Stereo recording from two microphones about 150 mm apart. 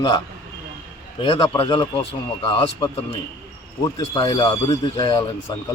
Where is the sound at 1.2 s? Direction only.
35° left (ahead or behind).